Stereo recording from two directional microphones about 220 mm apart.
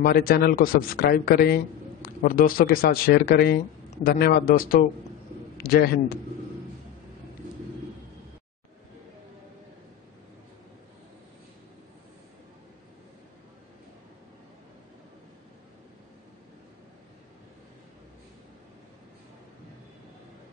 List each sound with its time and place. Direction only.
0.0 s a man's voice: 45° left (ahead or behind)